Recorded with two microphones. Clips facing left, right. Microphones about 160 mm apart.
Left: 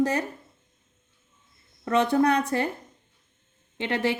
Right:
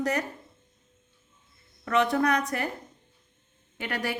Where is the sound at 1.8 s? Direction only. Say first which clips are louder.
Left 3 dB; 30° left (ahead or behind).